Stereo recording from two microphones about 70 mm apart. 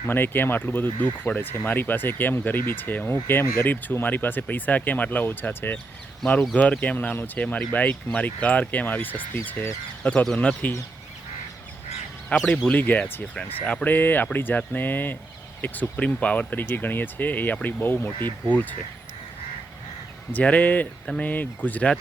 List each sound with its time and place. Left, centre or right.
0.1 s speech: left
10.3 s speech: centre
12.4 s speech: centre
12.7 s speech: left
20.3 s speech: left